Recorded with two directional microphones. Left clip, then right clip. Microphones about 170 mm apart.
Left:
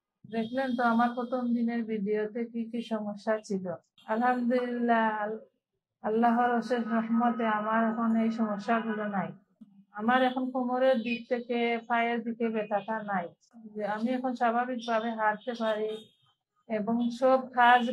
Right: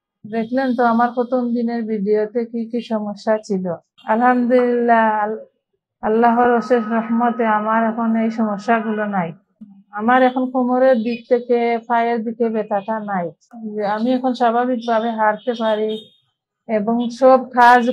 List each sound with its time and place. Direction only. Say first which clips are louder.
0.3 s a man's voice: right 11 dB; 45° right (ahead or behind)
16.9 s a man's voice: right 13 dB; 45° right (ahead or behind)